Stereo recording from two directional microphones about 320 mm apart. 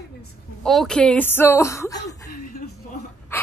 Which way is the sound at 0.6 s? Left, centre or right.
Centre.